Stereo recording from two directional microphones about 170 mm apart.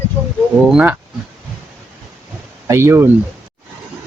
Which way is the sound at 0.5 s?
5° right (ahead or behind).